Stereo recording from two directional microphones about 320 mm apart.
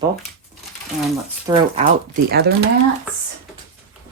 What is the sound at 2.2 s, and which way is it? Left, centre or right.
Speech, right.